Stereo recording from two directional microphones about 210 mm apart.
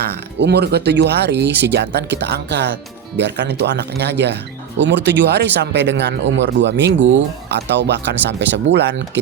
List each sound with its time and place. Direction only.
0.3 s speech: 55° right (ahead or behind)